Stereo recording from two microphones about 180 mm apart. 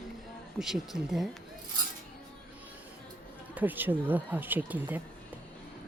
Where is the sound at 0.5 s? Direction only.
Centre (ahead or behind).